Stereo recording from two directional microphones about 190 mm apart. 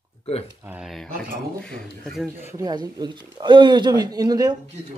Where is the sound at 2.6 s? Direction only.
20° right (ahead or behind).